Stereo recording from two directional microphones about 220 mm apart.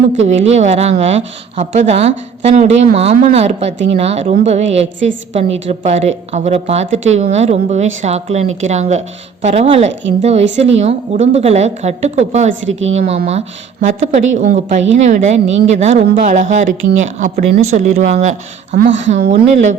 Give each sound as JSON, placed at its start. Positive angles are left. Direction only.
{"t": 0.3, "sound": "a woman's voice", "side_deg": -30}
{"t": 12.6, "sound": "a woman's voice", "side_deg": -60}
{"t": 13.0, "sound": "a woman's voice", "side_deg": -30}
{"t": 18.9, "sound": "a woman's voice", "side_deg": -55}
{"t": 19.2, "sound": "speech", "side_deg": -35}